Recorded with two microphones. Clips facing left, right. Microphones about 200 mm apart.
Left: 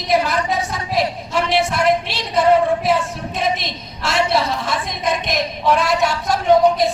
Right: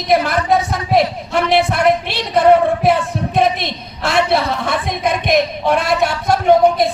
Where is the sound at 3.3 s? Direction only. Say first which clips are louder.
Right 6 dB; 60° right (ahead or behind).